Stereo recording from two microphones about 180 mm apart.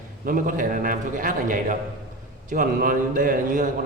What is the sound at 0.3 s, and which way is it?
A man's voice, 50° right (ahead or behind).